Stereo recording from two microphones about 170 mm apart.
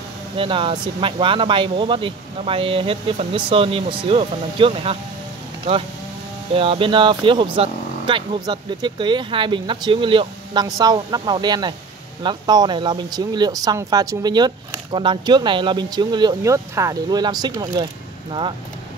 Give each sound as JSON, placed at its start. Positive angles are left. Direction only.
{"t": 0.4, "sound": "speech", "side_deg": -30}
{"t": 6.5, "sound": "speech", "side_deg": -30}